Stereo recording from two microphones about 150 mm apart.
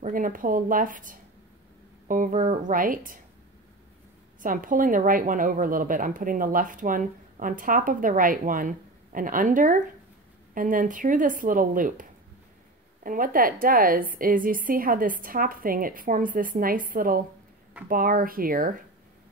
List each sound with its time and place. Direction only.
0.0 s a woman's voice: 65° right (ahead or behind)
4.4 s a woman's voice: 60° right (ahead or behind)